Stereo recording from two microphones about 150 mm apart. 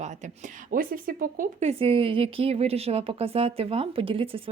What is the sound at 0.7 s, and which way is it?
Speech, 70° right (ahead or behind).